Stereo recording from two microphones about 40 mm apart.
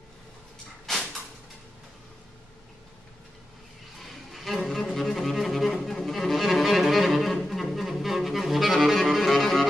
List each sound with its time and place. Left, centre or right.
4.0 s music: centre